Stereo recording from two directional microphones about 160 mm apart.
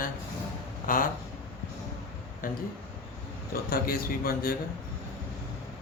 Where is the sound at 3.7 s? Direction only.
70° left (ahead or behind).